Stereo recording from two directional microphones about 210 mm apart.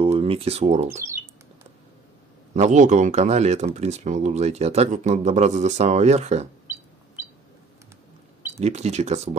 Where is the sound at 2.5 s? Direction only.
35° right (ahead or behind).